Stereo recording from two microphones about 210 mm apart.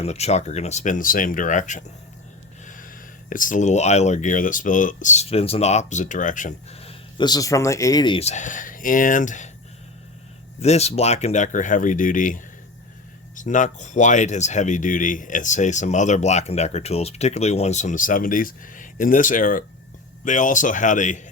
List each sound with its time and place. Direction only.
0.0 s speech: 30° left (ahead or behind)
10.6 s speech: 30° left (ahead or behind)